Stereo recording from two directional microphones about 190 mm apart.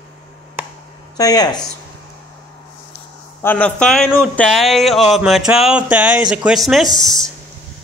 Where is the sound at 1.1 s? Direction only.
20° left (ahead or behind).